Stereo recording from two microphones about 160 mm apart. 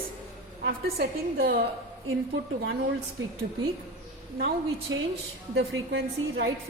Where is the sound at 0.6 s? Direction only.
75° right (ahead or behind).